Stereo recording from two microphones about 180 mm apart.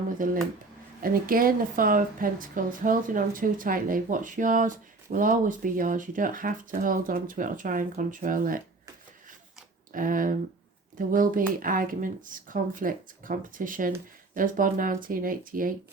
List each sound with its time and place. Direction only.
0.2 s a woman's voice: 50° right (ahead or behind)
9.9 s a woman's voice: 50° right (ahead or behind)